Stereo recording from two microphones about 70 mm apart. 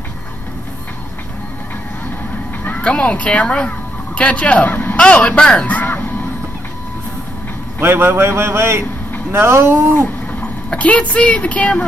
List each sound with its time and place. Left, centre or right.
2.8 s speech: centre
4.9 s a sound: centre
7.8 s a man's voice: right
10.7 s speech: centre